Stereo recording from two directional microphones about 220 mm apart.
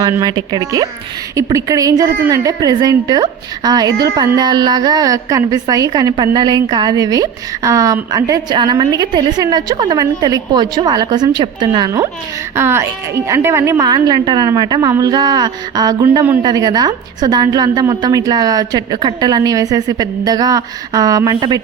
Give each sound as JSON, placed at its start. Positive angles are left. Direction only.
{"t": 0.0, "sound": "a woman's voice", "side_deg": -15}